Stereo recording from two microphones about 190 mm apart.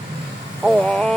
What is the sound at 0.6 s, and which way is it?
Speech, 5° left (ahead or behind).